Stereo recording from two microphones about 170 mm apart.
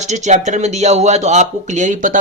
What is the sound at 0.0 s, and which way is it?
Speech, 45° right (ahead or behind).